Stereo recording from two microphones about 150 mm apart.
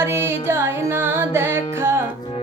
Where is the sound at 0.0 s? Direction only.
15° right (ahead or behind).